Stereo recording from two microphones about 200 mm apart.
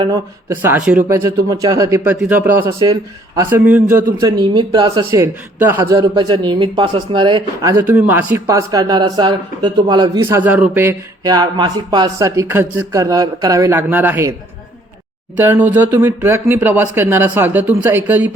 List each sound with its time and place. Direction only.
0.0 s speech: 15° right (ahead or behind)
4.2 s speech: 20° right (ahead or behind)
7.8 s speech: 10° right (ahead or behind)
15.4 s speech: 10° right (ahead or behind)